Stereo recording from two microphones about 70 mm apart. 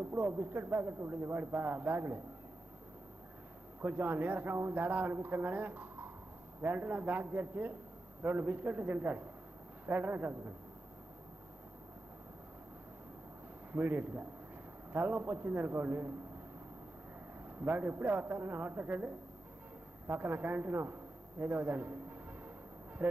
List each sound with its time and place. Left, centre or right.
0.2 s a man's voice: right
3.8 s a man's voice: right
13.7 s a man's voice: right
17.6 s a man's voice: right